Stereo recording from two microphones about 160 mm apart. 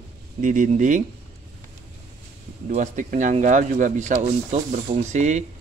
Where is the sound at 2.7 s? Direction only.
55° right (ahead or behind).